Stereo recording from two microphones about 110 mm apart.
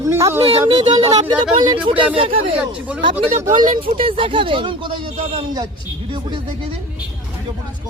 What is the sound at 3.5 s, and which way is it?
Speech, 50° right (ahead or behind).